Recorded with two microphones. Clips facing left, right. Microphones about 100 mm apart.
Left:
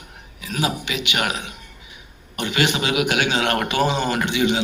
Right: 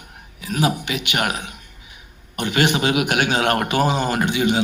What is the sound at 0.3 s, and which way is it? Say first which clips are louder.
A man's voice: right 3 dB; 50° right (ahead or behind).